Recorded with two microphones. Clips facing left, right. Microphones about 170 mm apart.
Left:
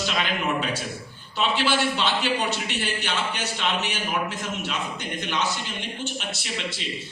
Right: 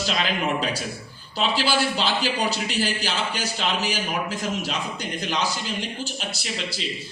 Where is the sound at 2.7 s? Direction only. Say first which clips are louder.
Right 2 dB; 35° right (ahead or behind).